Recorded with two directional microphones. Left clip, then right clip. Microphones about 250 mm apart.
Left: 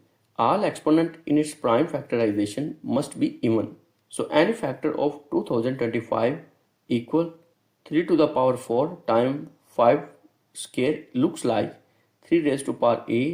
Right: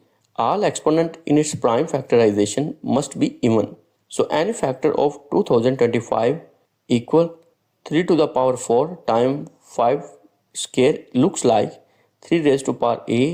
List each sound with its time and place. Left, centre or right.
0.3 s speech: right